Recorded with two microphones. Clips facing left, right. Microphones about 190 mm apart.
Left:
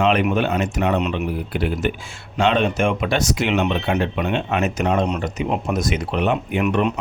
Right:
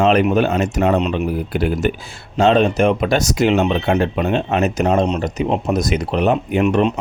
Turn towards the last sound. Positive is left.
turn(degrees=-25)  # may be behind; listen again after turning